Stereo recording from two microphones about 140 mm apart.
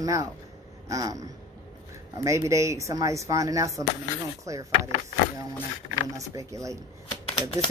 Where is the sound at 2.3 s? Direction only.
20° right (ahead or behind).